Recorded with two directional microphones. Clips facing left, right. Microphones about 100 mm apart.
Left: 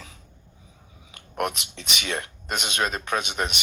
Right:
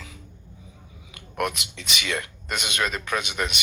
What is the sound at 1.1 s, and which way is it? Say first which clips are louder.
Speech: even; 20° left (ahead or behind).